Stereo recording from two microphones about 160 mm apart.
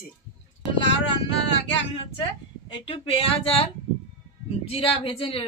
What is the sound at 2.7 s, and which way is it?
A woman's voice, 35° left (ahead or behind).